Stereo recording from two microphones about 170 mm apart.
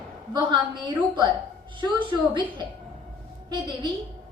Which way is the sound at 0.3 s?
30° right (ahead or behind).